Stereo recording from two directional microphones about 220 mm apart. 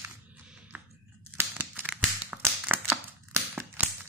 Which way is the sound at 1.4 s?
10° right (ahead or behind).